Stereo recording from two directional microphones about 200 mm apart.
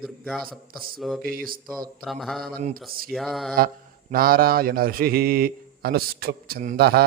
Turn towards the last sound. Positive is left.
turn(degrees=-50)  # may be behind; listen again after turning